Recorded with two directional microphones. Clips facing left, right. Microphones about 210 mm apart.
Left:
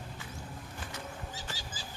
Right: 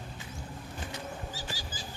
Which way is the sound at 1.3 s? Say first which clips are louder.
Right 3 dB; 25° left (ahead or behind).